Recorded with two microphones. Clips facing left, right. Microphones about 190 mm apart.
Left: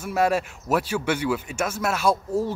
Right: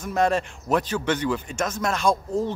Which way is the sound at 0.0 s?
5° left (ahead or behind).